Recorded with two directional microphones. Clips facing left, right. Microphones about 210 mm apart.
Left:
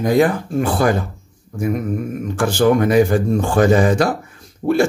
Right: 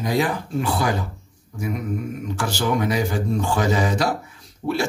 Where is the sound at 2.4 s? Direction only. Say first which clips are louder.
Left 9 dB; 50° left (ahead or behind).